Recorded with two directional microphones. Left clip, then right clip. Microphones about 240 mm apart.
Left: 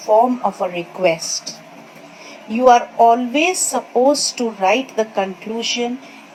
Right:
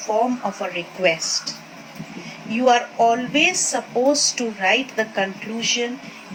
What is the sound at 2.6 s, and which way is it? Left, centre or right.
Speech, centre.